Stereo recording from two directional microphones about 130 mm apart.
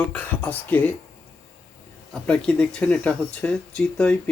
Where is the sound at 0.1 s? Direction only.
10° left (ahead or behind).